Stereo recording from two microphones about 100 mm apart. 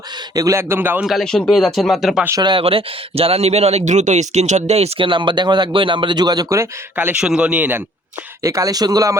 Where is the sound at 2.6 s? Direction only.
70° right (ahead or behind); by 6.6 s 40° right (ahead or behind).